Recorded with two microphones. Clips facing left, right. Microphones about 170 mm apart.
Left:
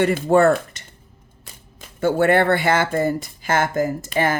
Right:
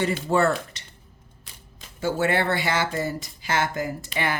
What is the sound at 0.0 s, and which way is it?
Speech, 50° left (ahead or behind).